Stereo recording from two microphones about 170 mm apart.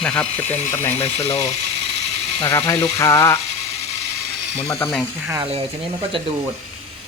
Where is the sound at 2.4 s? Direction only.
15° left (ahead or behind).